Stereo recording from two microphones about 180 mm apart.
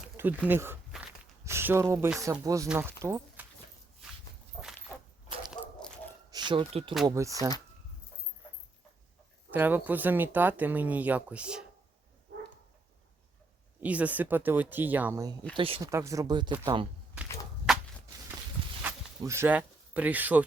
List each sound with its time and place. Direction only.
0.2 s speech: 10° right (ahead or behind)
4.9 s a sound: 15° left (ahead or behind)
5.6 s dog: 25° left (ahead or behind)
6.3 s speech: 25° right (ahead or behind)
7.1 s speech: 15° right (ahead or behind)
9.5 s speech: 10° right (ahead or behind)
13.8 s speech: 10° right (ahead or behind)
15.5 s speech: 30° right (ahead or behind)
15.8 s speech: 15° right (ahead or behind)
18.8 s a sound: 10° right (ahead or behind)